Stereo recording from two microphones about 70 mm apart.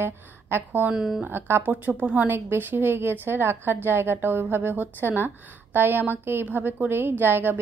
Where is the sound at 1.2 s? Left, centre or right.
Right.